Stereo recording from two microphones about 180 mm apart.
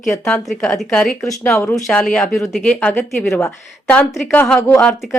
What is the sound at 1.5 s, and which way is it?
Speech, 15° left (ahead or behind).